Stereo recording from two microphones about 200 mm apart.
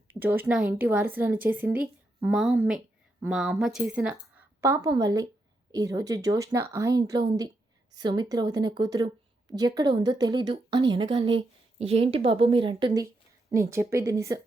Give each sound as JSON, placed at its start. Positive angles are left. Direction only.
{"t": 0.1, "sound": "a woman's voice", "side_deg": -10}